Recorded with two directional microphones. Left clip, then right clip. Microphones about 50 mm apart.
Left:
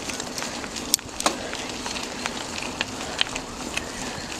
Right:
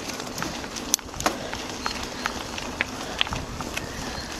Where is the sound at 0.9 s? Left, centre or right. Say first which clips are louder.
Left 1 dB; centre.